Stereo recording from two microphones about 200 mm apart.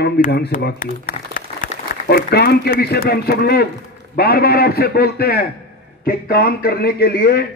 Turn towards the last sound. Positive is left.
turn(degrees=55)  # may be behind; listen again after turning